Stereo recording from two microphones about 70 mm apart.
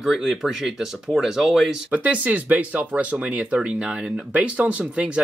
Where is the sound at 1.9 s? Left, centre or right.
Right.